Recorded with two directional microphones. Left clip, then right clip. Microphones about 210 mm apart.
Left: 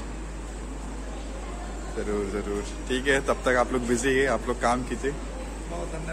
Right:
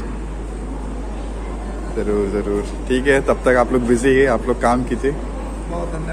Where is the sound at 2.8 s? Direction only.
Centre (ahead or behind).